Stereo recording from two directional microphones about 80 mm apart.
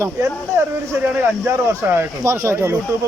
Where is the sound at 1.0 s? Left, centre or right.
Right.